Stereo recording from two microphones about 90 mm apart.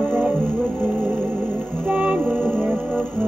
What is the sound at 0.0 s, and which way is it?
Music, 20° right (ahead or behind).